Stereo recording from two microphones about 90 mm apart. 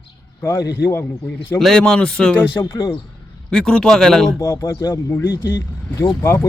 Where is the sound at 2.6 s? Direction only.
35° left (ahead or behind).